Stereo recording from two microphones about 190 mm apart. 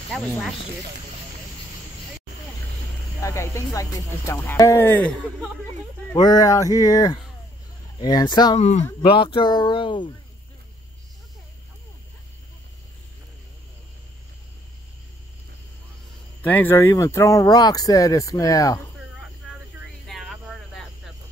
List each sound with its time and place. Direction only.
0.1 s speech: 5° left (ahead or behind)
3.2 s speech: 15° left (ahead or behind)
6.1 s speech: 20° left (ahead or behind)
8.5 s speech: 35° left (ahead or behind)
9.0 s speech: 25° left (ahead or behind)
16.4 s speech: 10° left (ahead or behind)
20.1 s cricket: centre (ahead or behind)